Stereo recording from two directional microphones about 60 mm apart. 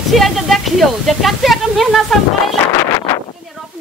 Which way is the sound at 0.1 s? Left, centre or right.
Centre.